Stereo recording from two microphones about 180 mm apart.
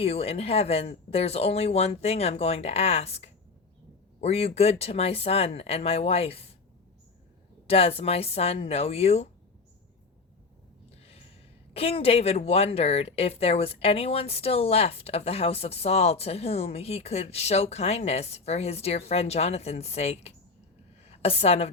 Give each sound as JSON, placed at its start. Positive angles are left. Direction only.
{"t": 0.0, "sound": "speech", "side_deg": 35}
{"t": 7.7, "sound": "speech", "side_deg": 35}
{"t": 11.0, "sound": "gasp", "side_deg": 35}
{"t": 11.7, "sound": "a woman's voice", "side_deg": 30}